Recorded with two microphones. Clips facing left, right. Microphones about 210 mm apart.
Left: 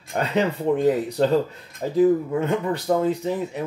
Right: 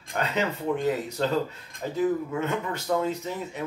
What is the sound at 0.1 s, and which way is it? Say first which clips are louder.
Speech: left 5 dB; 35° left (ahead or behind).